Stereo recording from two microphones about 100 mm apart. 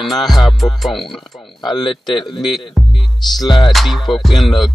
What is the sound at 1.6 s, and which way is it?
Speech, 50° left (ahead or behind).